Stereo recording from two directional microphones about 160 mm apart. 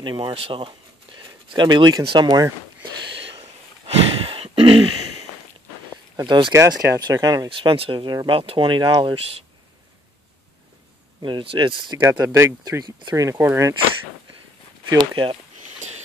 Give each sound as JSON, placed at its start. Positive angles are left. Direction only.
{"t": 0.0, "sound": "speech", "side_deg": -30}
{"t": 3.3, "sound": "a sound", "side_deg": -35}
{"t": 6.1, "sound": "speech", "side_deg": -30}
{"t": 11.2, "sound": "speech", "side_deg": -30}
{"t": 12.0, "sound": "speech", "side_deg": -20}
{"t": 14.9, "sound": "speech", "side_deg": -30}
{"t": 15.6, "sound": "a sound", "side_deg": -45}